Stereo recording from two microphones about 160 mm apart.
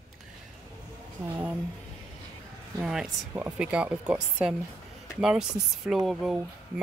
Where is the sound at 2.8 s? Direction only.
5° right (ahead or behind).